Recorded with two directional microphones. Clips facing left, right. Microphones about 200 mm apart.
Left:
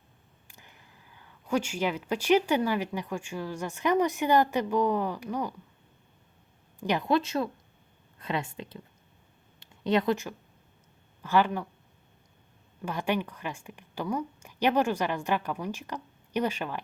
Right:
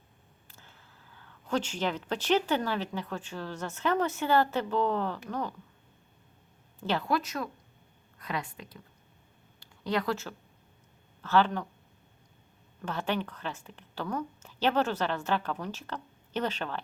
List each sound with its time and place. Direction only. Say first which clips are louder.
0.4 s speech: left 2 dB; 15° left (ahead or behind)
6.7 s speech: left 3 dB; 15° left (ahead or behind)
9.6 s a sound: left 5 dB; 20° left (ahead or behind)
11.2 s speech: even; 10° left (ahead or behind)
12.8 s speech: left 2 dB; 10° left (ahead or behind)